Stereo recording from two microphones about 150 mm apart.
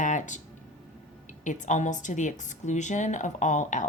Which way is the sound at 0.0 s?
55° left (ahead or behind).